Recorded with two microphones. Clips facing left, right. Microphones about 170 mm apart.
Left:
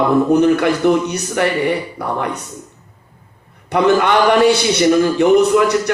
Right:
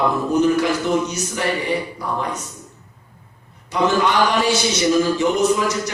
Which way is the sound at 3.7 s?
60° left (ahead or behind).